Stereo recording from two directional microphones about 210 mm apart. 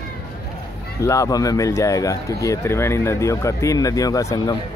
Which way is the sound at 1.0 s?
15° left (ahead or behind).